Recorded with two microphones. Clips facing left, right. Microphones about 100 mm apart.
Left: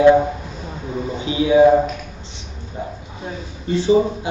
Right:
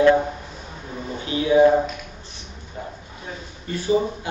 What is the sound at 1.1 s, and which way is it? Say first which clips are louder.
Speech: left 3 dB; 15° left (ahead or behind).